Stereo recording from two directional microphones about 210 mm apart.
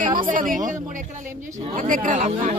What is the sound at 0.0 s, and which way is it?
Speech, 40° right (ahead or behind).